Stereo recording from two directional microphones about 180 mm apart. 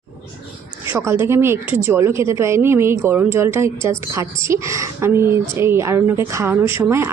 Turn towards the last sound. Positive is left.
turn(degrees=-15)  # may be behind; listen again after turning